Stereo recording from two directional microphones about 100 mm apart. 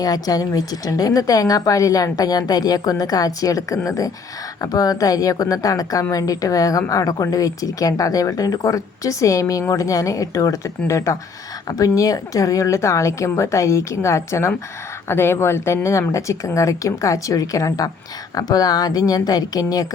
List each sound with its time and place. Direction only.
0.0 s a woman's voice: 40° left (ahead or behind)